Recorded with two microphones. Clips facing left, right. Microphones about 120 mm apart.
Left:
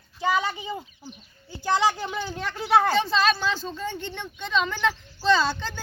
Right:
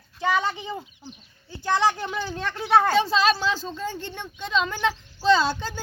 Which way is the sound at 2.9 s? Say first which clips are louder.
Right 2 dB; 5° right (ahead or behind).